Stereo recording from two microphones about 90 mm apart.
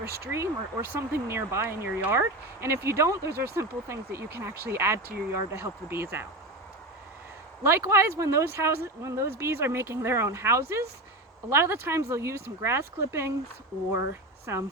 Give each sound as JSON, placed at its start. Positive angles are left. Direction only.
{"t": 0.1, "sound": "speech", "side_deg": -30}
{"t": 7.6, "sound": "speech", "side_deg": -30}
{"t": 14.5, "sound": "speech", "side_deg": -30}